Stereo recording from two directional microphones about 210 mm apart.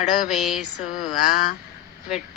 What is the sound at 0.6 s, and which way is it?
Speech, 40° left (ahead or behind).